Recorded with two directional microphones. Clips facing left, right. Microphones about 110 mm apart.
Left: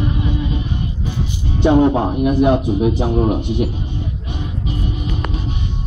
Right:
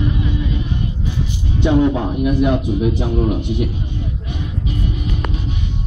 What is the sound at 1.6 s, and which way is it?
A man's voice, 35° left (ahead or behind).